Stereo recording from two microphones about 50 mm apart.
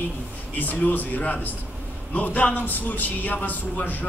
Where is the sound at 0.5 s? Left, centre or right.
Left.